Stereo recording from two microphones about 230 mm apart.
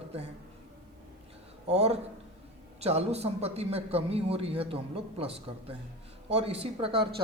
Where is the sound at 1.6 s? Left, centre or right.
Right.